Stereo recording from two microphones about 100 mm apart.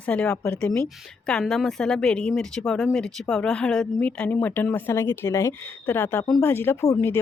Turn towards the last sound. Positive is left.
turn(degrees=25)  # may be behind; listen again after turning